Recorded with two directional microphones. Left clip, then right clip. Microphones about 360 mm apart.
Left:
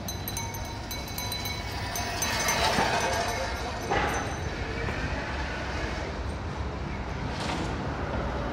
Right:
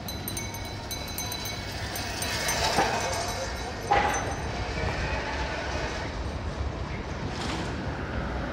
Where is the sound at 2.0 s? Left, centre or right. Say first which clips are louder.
Left 2 dB; centre.